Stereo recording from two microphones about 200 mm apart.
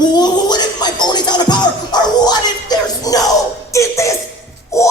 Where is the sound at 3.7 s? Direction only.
15° left (ahead or behind).